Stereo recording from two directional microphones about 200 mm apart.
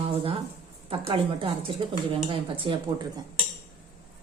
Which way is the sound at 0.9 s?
25° right (ahead or behind).